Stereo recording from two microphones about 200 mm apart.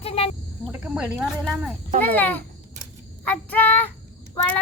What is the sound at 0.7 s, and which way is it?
Speech, 5° right (ahead or behind).